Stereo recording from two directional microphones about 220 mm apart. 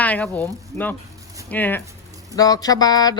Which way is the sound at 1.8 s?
15° right (ahead or behind).